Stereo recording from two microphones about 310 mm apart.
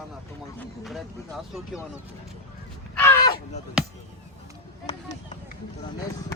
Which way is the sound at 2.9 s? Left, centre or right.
Centre.